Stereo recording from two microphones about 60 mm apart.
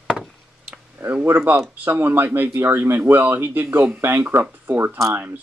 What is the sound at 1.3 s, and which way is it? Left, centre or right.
Speech, right.